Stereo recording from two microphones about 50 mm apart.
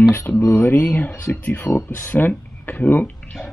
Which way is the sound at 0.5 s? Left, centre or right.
Left.